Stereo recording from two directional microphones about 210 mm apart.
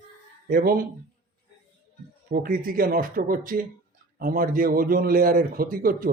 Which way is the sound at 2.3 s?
45° right (ahead or behind).